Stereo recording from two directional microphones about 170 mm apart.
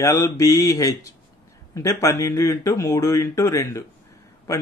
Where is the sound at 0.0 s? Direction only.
20° left (ahead or behind).